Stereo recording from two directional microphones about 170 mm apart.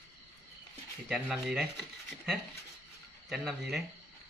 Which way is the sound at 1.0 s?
5° right (ahead or behind).